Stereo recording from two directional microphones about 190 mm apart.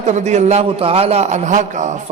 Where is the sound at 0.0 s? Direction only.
40° right (ahead or behind).